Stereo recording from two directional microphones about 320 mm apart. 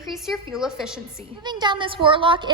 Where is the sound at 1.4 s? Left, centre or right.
Centre.